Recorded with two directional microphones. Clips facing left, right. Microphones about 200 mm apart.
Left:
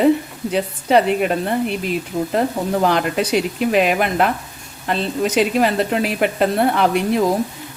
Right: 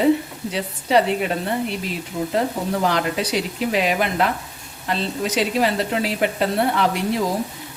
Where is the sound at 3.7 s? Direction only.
55° left (ahead or behind).